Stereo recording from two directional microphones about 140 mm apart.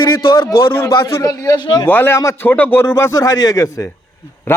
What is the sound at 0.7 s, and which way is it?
Speech, 20° left (ahead or behind).